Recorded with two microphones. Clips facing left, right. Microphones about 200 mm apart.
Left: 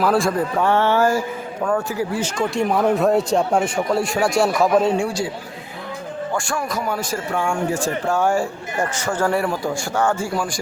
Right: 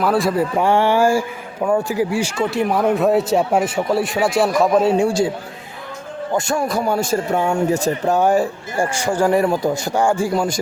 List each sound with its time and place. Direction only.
0.0 s a man's voice: centre (ahead or behind)
0.5 s a sound: 15° right (ahead or behind)
1.6 s a man's voice: 15° right (ahead or behind)
4.9 s a man's voice: 25° right (ahead or behind)
6.3 s a man's voice: 20° right (ahead or behind)